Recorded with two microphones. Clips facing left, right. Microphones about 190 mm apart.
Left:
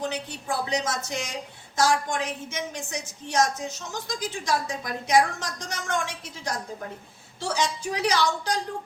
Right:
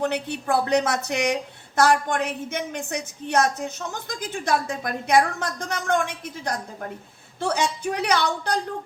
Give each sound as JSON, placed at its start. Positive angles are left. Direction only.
{"t": 0.0, "sound": "a woman's voice", "side_deg": -60}